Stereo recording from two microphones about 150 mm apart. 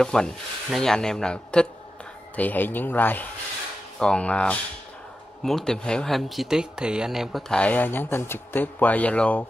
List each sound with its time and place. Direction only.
0.0 s speech: 5° left (ahead or behind)